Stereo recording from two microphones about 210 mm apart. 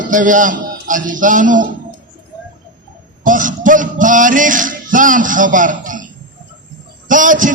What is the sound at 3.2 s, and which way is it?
Music, 40° right (ahead or behind).